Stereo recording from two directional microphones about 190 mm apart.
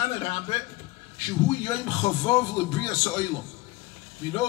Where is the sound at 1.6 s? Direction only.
20° left (ahead or behind).